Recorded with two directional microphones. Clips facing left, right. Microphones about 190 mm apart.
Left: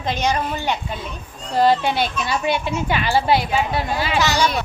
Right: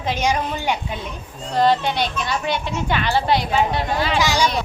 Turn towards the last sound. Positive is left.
turn(degrees=-10)  # may be behind; listen again after turning